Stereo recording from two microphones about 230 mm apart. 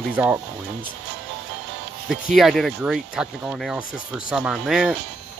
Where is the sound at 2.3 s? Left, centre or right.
Centre.